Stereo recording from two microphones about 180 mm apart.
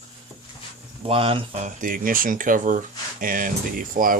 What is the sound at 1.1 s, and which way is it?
Speech, 30° right (ahead or behind).